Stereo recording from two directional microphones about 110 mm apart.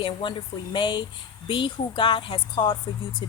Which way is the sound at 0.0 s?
50° left (ahead or behind).